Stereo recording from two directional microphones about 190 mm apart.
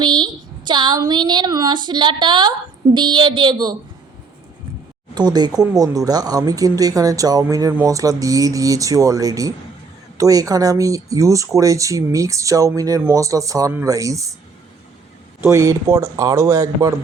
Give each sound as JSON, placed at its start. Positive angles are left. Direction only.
{"t": 0.0, "sound": "speech", "side_deg": -25}
{"t": 5.1, "sound": "speech", "side_deg": -20}
{"t": 15.4, "sound": "speech", "side_deg": -15}